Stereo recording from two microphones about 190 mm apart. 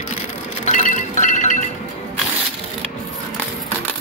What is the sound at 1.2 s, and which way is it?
Music, 40° left (ahead or behind).